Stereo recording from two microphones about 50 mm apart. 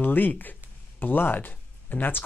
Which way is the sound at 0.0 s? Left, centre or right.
Left.